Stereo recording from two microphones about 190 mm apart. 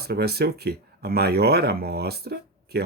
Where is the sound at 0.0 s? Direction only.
55° right (ahead or behind).